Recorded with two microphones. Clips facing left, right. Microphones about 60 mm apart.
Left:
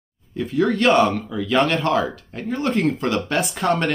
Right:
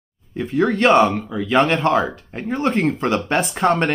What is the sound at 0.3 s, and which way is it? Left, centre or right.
Speech, right.